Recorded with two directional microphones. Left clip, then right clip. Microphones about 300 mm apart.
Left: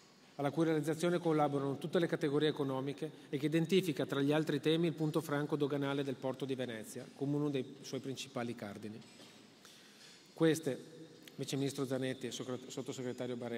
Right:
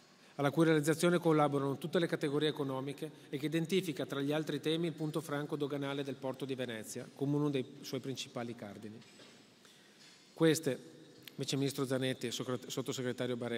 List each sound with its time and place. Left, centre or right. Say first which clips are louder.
0.4 s a man's voice: right 4 dB; right
8.4 s a man's voice: left 1 dB; centre
10.3 s a man's voice: right 2 dB; centre